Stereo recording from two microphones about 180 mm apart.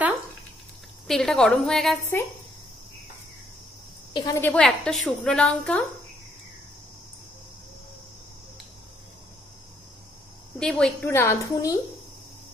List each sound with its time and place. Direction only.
1.0 s a woman's voice: centre (ahead or behind)
4.1 s a woman's voice: 25° left (ahead or behind)
4.4 s a woman's voice: 5° left (ahead or behind)
10.6 s a woman's voice: 5° left (ahead or behind)
11.1 s a woman's voice: 15° left (ahead or behind)